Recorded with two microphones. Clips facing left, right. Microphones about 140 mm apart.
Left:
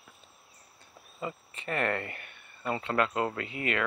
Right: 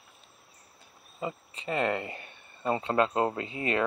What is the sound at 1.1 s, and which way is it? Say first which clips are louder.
Speech: right 2 dB; 20° right (ahead or behind).